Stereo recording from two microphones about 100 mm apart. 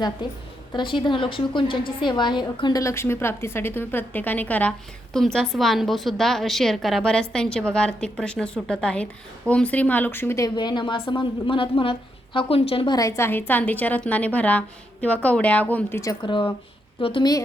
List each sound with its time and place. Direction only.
0.2 s a woman's voice: 50° left (ahead or behind)
2.8 s a woman's voice: 25° left (ahead or behind)
5.1 s a woman's voice: 5° left (ahead or behind); by 10.4 s 25° left (ahead or behind)
10.4 s a woman's voice: 45° left (ahead or behind); by 12.9 s 70° left (ahead or behind)
12.9 s a woman's voice: 35° left (ahead or behind); by 16.0 s 15° left (ahead or behind)
16.2 s a woman's voice: 55° left (ahead or behind)